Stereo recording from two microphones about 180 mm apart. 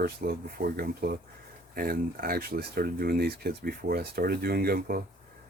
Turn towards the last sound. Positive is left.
turn(degrees=-55)  # may be behind; listen again after turning